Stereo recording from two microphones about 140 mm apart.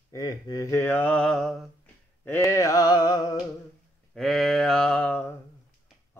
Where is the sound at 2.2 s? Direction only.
20° left (ahead or behind).